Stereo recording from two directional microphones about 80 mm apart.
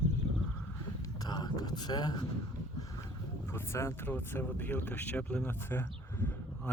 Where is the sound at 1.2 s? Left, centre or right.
Left.